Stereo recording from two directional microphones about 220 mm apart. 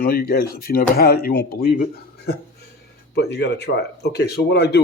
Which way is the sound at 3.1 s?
50° left (ahead or behind).